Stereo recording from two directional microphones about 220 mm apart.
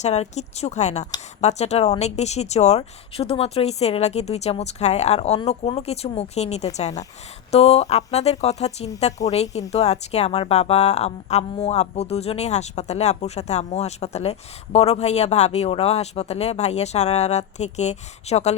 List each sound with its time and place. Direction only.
0.0 s speech: 30° left (ahead or behind)